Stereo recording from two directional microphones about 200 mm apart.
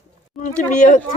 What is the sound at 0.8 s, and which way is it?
Speech, 40° left (ahead or behind).